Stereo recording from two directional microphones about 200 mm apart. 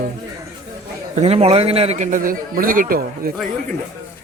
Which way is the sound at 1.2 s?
30° right (ahead or behind).